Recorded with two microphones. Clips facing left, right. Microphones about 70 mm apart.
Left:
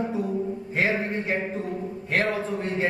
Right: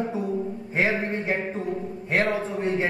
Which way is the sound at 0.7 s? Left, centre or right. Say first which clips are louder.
Right 1 dB; right.